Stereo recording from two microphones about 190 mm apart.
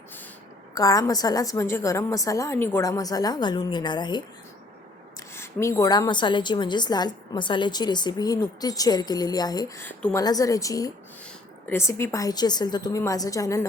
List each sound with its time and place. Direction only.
0.7 s a woman's voice: 20° left (ahead or behind)
5.3 s a woman's voice: 15° left (ahead or behind)